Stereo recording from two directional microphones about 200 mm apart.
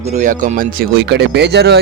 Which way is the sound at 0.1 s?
40° right (ahead or behind).